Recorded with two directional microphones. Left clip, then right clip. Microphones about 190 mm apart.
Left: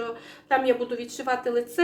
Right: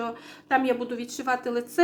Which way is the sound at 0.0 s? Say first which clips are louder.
Even; 25° right (ahead or behind).